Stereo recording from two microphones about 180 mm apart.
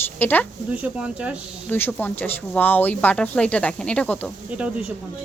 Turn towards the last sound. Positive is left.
turn(degrees=-5)  # may be behind; listen again after turning